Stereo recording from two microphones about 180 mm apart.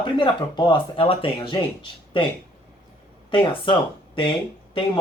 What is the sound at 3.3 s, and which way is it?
Speech, 30° left (ahead or behind).